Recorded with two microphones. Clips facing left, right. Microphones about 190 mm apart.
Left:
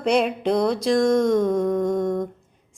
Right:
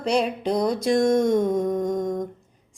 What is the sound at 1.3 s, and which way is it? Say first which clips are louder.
Humming: left 2 dB; 20° right (ahead or behind).